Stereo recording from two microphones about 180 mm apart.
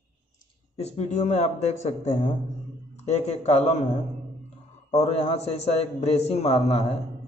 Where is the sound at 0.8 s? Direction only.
40° left (ahead or behind).